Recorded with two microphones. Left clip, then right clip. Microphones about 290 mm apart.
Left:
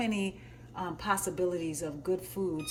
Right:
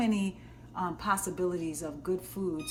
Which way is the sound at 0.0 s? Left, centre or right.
Centre.